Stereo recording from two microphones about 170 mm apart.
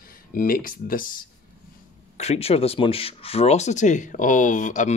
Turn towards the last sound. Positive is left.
turn(degrees=45)  # may be behind; listen again after turning